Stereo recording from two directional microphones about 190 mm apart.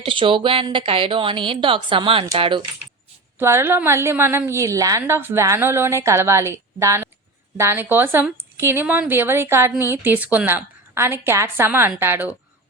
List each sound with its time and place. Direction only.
0.0 s speech: 25° right (ahead or behind)
3.3 s a woman's voice: 10° right (ahead or behind)